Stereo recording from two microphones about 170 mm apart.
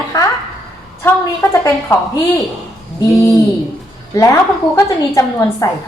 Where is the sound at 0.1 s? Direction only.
20° left (ahead or behind).